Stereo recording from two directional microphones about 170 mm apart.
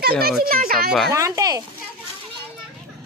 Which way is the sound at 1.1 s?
20° right (ahead or behind).